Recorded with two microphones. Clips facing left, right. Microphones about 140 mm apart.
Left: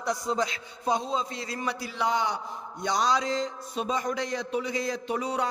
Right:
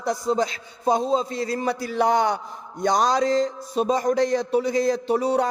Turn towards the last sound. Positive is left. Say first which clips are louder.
# right 8 dB
turn(degrees=-40)  # may be behind; listen again after turning